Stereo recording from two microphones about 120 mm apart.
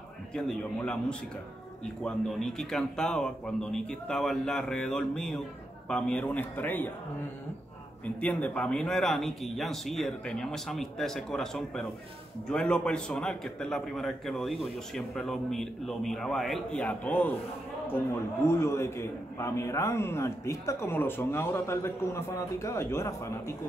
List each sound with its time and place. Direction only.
0.3 s a man's voice: 5° left (ahead or behind)
2.0 s a man's voice: 5° left (ahead or behind)
8.0 s a man's voice: 10° left (ahead or behind)